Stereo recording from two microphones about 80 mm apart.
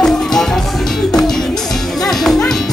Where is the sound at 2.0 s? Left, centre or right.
Centre.